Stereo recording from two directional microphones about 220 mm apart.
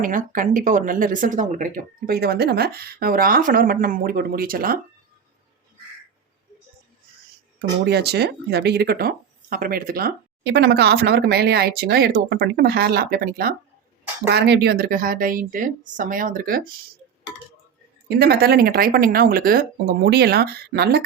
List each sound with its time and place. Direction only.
0.0 s speech: 35° right (ahead or behind)
7.9 s speech: 50° right (ahead or behind)
18.2 s speech: 45° right (ahead or behind)